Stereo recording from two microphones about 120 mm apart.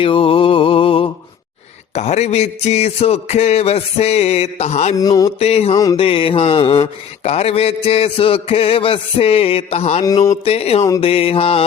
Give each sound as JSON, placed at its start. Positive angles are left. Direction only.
{"t": 0.0, "sound": "mantra", "side_deg": 50}
{"t": 2.0, "sound": "music", "side_deg": 65}
{"t": 4.9, "sound": "mantra", "side_deg": 30}
{"t": 5.4, "sound": "music", "side_deg": 60}
{"t": 5.7, "sound": "mantra", "side_deg": 30}
{"t": 6.0, "sound": "music", "side_deg": 50}
{"t": 10.0, "sound": "mantra", "side_deg": 30}
{"t": 10.4, "sound": "music", "side_deg": 55}